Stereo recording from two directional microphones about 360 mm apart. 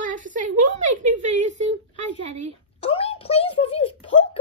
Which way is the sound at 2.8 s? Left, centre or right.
Centre.